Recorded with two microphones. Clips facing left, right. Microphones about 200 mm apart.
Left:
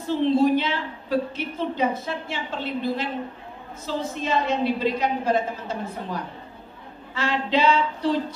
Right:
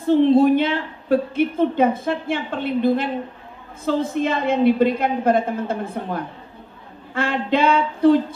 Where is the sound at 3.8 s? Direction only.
55° right (ahead or behind).